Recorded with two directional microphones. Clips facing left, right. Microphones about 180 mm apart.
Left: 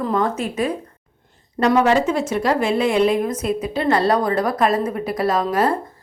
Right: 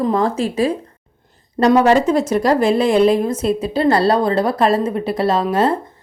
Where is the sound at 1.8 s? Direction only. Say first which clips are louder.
Right 4 dB; 40° right (ahead or behind).